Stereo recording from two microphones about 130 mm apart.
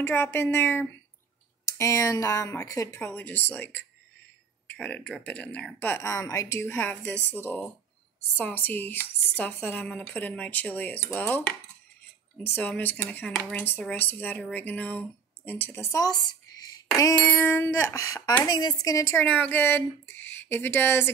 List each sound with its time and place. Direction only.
0.0 s speech: 15° left (ahead or behind)
5.9 s speech: 25° left (ahead or behind)
12.5 s speech: 15° left (ahead or behind)